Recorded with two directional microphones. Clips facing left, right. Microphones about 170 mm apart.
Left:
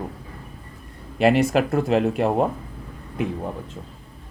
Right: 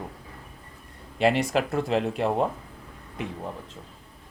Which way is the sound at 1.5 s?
60° left (ahead or behind).